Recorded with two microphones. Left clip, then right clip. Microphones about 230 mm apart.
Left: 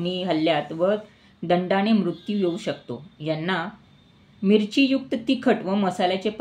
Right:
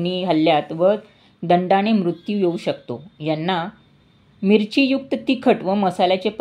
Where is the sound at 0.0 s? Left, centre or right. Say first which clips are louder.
Right 5 dB; right.